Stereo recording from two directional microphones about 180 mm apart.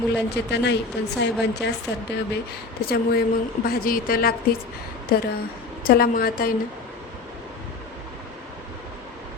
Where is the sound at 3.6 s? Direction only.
55° left (ahead or behind).